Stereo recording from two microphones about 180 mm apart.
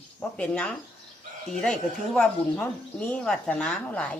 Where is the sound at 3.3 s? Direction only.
5° left (ahead or behind).